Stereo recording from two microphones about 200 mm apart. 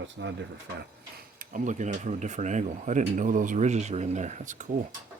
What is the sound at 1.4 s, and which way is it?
Speech, 40° right (ahead or behind).